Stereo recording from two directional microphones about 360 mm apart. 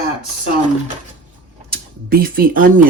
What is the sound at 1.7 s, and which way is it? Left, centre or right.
Speech, right.